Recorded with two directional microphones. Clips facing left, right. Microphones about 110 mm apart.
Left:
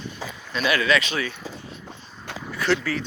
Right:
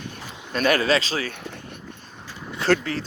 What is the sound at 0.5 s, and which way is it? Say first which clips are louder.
Speech: right 2 dB; 45° right (ahead or behind).